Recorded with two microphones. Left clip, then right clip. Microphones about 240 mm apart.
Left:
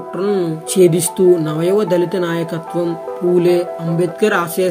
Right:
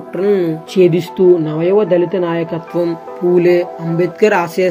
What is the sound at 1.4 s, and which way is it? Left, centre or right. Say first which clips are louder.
Speech: right 2 dB; centre.